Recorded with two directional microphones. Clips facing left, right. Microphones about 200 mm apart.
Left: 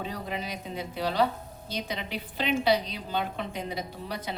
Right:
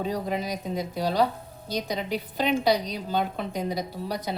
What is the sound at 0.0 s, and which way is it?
A woman's voice, 40° right (ahead or behind).